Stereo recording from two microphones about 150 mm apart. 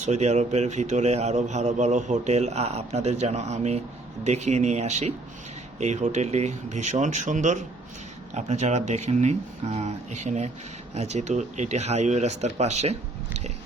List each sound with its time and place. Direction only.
0.0 s a man's voice: 50° right (ahead or behind)